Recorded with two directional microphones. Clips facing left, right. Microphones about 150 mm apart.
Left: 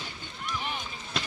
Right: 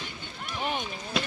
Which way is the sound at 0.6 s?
45° right (ahead or behind).